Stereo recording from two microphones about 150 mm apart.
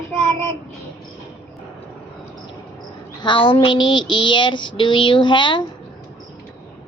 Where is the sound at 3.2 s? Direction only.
35° left (ahead or behind).